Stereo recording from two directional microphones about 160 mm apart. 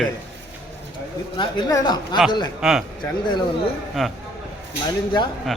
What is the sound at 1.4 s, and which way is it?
Speech, 30° left (ahead or behind).